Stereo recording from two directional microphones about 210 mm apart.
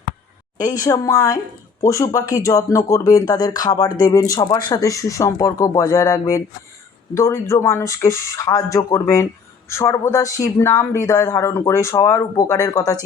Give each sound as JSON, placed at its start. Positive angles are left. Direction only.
{"t": 0.6, "sound": "speech", "side_deg": 15}